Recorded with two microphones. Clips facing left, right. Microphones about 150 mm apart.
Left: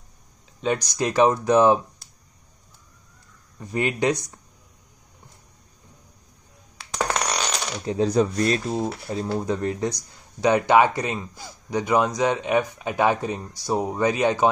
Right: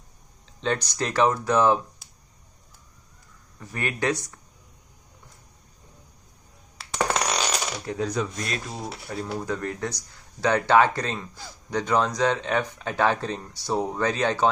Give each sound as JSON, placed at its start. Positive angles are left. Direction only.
{"t": 0.6, "sound": "speech", "side_deg": 10}
{"t": 3.5, "sound": "speech", "side_deg": 20}
{"t": 6.8, "sound": "a sound", "side_deg": -5}
{"t": 7.8, "sound": "speech", "side_deg": 25}
{"t": 9.0, "sound": "speech", "side_deg": 25}